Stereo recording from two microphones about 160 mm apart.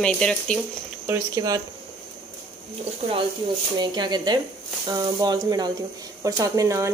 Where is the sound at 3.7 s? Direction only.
25° right (ahead or behind).